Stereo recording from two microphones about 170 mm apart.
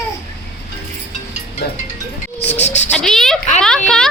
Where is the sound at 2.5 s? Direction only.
40° left (ahead or behind).